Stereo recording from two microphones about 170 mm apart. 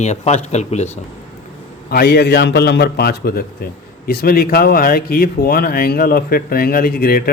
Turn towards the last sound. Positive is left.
turn(degrees=65)  # may be behind; listen again after turning